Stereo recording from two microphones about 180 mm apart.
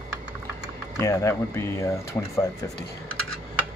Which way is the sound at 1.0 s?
15° left (ahead or behind).